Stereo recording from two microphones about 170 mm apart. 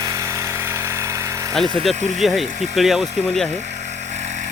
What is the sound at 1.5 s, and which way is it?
Speech, centre (ahead or behind).